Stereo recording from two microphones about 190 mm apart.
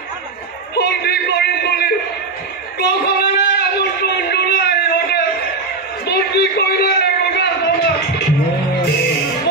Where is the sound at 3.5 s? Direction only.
60° left (ahead or behind).